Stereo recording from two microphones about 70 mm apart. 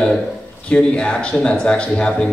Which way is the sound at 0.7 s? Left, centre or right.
Centre.